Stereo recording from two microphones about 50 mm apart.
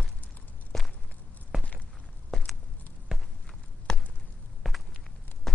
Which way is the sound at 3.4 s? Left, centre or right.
Centre.